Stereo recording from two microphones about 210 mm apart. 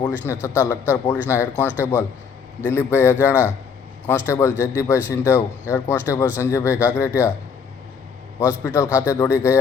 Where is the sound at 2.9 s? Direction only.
10° left (ahead or behind).